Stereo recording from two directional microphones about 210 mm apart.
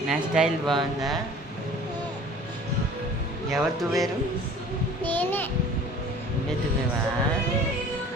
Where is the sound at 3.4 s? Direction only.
Centre (ahead or behind).